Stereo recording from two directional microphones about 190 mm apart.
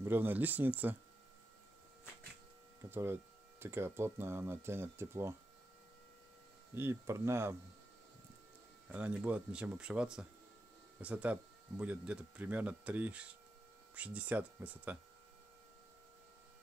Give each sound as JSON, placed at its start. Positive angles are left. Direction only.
{"t": 0.0, "sound": "speech", "side_deg": -10}
{"t": 2.9, "sound": "speech", "side_deg": -10}
{"t": 6.7, "sound": "speech", "side_deg": -15}
{"t": 8.8, "sound": "speech", "side_deg": -10}